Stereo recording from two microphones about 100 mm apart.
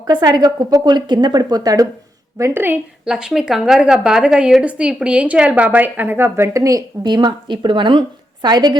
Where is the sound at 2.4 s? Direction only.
25° right (ahead or behind).